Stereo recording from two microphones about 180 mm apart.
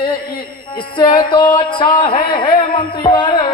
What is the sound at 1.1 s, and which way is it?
Music, 25° left (ahead or behind).